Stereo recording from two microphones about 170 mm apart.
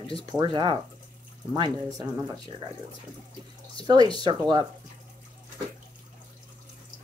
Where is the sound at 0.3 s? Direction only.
25° right (ahead or behind).